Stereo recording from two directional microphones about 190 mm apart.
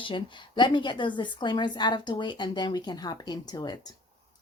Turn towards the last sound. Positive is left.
turn(degrees=20)  # may be behind; listen again after turning